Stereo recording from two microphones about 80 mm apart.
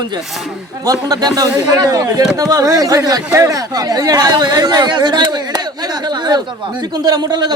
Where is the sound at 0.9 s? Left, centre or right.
Right.